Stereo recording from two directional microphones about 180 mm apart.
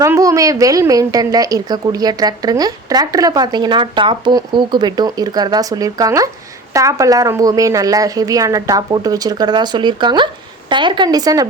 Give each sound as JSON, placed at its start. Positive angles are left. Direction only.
{"t": 0.0, "sound": "a woman's voice", "side_deg": -15}